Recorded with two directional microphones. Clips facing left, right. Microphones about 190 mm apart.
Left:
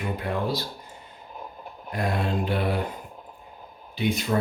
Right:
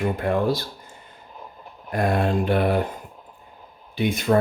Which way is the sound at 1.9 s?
50° right (ahead or behind).